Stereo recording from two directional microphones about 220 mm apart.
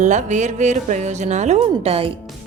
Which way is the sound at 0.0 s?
35° right (ahead or behind).